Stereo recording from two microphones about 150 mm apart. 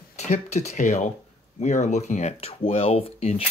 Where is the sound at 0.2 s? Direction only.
50° left (ahead or behind).